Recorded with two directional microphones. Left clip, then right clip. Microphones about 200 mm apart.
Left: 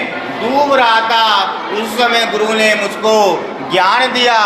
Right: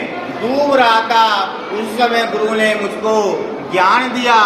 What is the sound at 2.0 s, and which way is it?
A man's voice, 25° left (ahead or behind).